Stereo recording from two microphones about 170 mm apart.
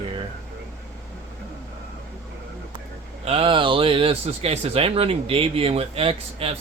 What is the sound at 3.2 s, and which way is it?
Speech, 35° right (ahead or behind).